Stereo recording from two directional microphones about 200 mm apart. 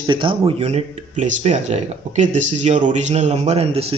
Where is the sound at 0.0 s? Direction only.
25° right (ahead or behind).